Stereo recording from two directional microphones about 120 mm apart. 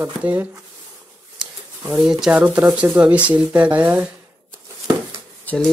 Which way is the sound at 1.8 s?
5° right (ahead or behind).